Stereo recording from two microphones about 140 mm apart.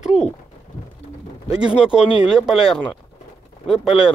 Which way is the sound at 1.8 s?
5° right (ahead or behind).